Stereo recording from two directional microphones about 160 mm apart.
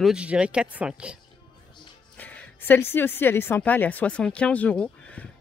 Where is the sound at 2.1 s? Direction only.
10° left (ahead or behind).